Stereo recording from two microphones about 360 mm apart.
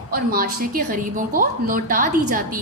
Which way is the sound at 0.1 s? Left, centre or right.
Right.